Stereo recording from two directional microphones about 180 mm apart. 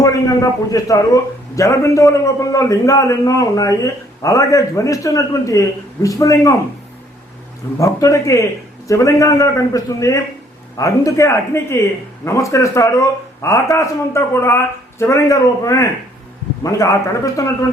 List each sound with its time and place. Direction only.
0.0 s a man's voice: 20° left (ahead or behind)
7.8 s a man's voice: 20° left (ahead or behind)